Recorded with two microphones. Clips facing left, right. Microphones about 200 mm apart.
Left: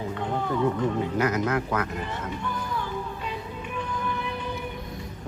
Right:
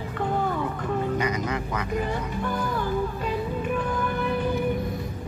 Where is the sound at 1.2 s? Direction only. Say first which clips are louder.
Left 2 dB; 5° left (ahead or behind).